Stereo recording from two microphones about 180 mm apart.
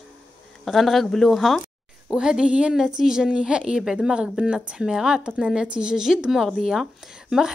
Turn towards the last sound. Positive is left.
turn(degrees=-5)  # may be behind; listen again after turning